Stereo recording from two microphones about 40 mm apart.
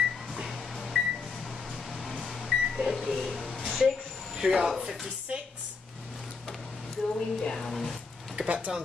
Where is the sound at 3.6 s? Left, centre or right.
Centre.